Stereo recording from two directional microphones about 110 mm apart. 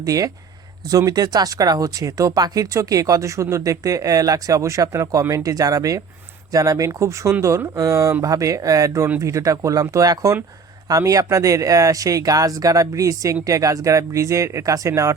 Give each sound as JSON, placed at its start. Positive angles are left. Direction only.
{"t": 0.0, "sound": "speech", "side_deg": -30}